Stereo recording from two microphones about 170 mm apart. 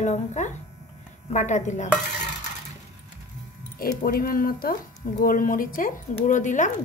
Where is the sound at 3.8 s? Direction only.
60° left (ahead or behind).